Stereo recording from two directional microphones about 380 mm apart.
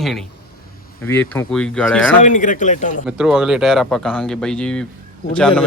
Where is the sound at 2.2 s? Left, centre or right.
Centre.